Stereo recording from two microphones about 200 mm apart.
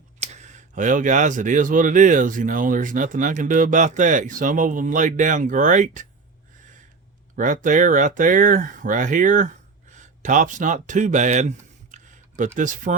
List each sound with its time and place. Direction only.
0.2 s speech: 35° right (ahead or behind)
7.3 s speech: 40° right (ahead or behind)